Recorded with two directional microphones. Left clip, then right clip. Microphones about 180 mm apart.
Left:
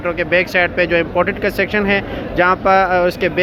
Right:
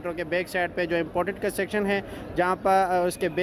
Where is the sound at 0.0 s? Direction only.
25° right (ahead or behind).